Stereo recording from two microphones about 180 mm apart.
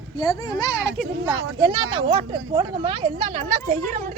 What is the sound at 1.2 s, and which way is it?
Speech, 20° right (ahead or behind).